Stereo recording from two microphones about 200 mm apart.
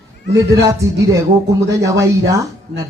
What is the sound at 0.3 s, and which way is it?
A man's voice, 15° right (ahead or behind).